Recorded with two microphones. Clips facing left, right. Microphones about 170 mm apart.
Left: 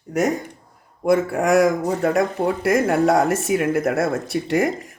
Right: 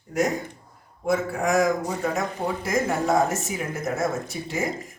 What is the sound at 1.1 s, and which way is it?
Speech, 75° left (ahead or behind).